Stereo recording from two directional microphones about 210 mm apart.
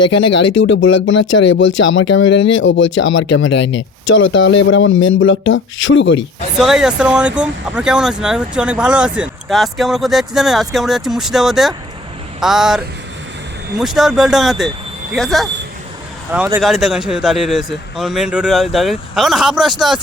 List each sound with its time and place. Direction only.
0.6 s speech: 60° left (ahead or behind)
6.6 s speech: centre (ahead or behind)
16.6 s speech: centre (ahead or behind)